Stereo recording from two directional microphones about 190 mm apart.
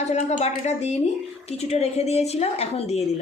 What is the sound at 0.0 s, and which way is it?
A woman's voice, 35° left (ahead or behind).